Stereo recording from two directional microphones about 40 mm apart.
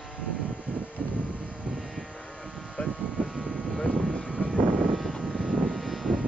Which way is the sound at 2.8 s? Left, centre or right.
Left.